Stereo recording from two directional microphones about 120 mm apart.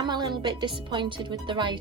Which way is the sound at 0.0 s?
35° right (ahead or behind).